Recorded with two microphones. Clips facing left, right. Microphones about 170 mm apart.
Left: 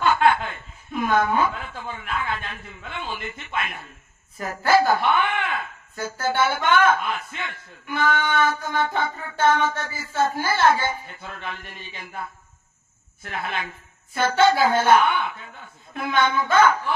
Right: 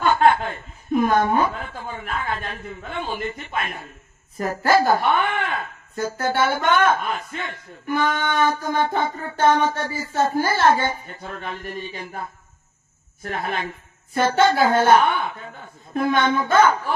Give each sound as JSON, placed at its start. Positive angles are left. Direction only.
{"t": 0.0, "sound": "speech", "side_deg": -35}
{"t": 15.0, "sound": "speech", "side_deg": -45}